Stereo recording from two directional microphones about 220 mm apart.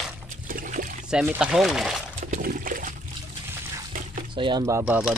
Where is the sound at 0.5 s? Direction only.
40° right (ahead or behind).